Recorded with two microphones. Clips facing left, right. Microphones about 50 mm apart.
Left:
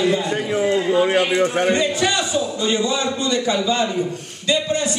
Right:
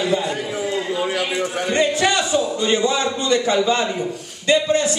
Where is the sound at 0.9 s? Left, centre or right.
Left.